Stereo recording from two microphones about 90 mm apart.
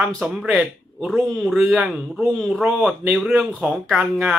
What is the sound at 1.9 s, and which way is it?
Speech, 5° right (ahead or behind).